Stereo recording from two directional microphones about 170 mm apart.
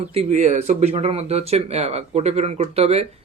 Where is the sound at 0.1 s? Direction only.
40° right (ahead or behind).